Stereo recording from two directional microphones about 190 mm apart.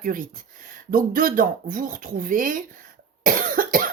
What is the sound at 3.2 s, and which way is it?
Cough, 45° right (ahead or behind).